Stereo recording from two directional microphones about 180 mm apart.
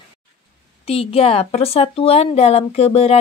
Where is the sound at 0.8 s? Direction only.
35° left (ahead or behind).